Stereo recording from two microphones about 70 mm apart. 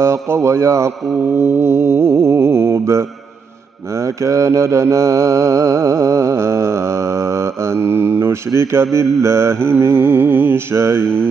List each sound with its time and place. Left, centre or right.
0.0 s mantra: right